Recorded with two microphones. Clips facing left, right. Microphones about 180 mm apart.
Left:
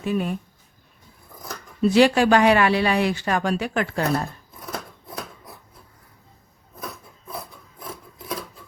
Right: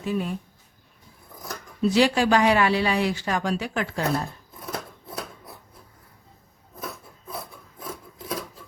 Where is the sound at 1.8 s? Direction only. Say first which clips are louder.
Left 4 dB; 60° left (ahead or behind).